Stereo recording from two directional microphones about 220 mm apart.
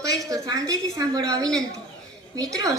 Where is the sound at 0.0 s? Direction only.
15° right (ahead or behind).